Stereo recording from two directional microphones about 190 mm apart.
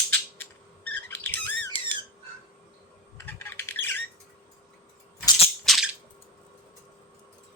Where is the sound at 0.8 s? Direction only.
65° right (ahead or behind).